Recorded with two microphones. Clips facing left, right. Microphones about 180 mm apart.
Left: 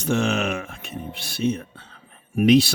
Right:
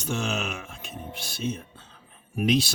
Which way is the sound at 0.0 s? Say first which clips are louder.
Left 7 dB; 60° left (ahead or behind).